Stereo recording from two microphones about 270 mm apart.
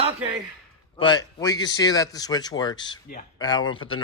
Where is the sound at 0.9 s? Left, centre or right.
Centre.